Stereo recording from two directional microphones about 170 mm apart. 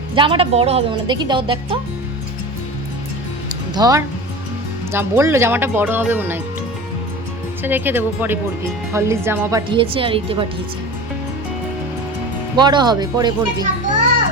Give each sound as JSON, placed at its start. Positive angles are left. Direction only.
{"t": 0.2, "sound": "speech", "side_deg": -30}
{"t": 3.8, "sound": "speech", "side_deg": -20}
{"t": 7.6, "sound": "speech", "side_deg": -10}
{"t": 12.5, "sound": "speech", "side_deg": -25}